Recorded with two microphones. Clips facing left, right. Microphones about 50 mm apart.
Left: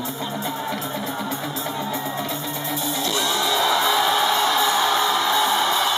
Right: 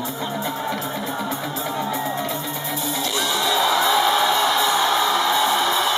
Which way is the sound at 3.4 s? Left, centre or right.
Centre.